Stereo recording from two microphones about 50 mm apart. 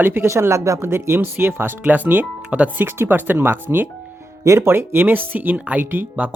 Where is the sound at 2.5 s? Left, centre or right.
Right.